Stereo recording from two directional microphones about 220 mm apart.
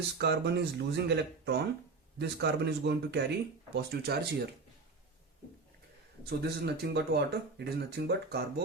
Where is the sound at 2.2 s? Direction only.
50° right (ahead or behind).